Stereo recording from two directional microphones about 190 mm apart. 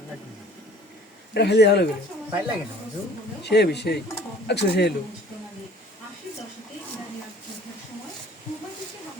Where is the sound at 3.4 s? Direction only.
60° left (ahead or behind).